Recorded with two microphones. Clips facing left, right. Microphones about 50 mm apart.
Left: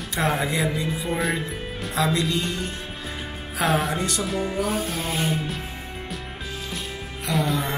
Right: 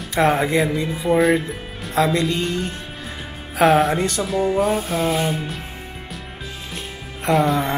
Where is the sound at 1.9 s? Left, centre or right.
Right.